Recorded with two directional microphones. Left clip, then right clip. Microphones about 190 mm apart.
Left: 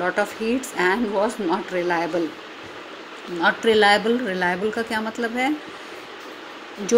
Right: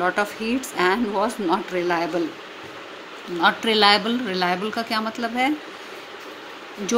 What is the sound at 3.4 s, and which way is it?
A woman's voice, 15° right (ahead or behind).